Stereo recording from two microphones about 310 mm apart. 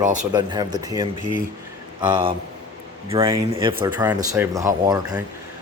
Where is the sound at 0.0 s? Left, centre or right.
Right.